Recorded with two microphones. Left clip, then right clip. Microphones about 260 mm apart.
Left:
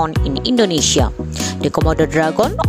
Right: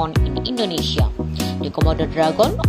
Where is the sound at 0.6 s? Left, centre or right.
Left.